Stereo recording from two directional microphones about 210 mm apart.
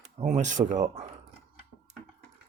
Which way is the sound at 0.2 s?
35° right (ahead or behind).